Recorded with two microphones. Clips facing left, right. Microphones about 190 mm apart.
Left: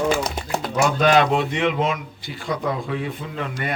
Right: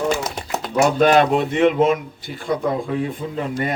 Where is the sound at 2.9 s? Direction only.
35° right (ahead or behind).